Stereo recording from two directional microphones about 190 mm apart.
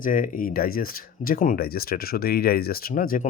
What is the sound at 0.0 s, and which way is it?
Speech, 45° left (ahead or behind).